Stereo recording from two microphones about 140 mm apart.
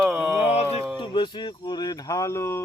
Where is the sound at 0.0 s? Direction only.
5° right (ahead or behind).